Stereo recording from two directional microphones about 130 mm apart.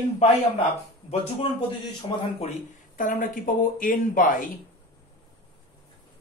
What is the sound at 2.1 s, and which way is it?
Speech, 35° left (ahead or behind).